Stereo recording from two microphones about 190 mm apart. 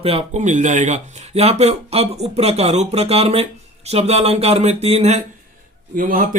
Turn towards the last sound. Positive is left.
turn(degrees=-45)  # may be behind; listen again after turning